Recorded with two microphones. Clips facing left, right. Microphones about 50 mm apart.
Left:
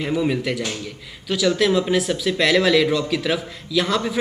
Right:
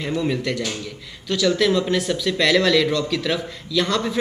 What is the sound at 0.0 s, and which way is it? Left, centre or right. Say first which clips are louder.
Speech: left 2 dB; centre.